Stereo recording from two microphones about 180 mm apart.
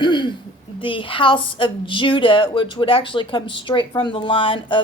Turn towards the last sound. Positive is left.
turn(degrees=30)  # may be behind; listen again after turning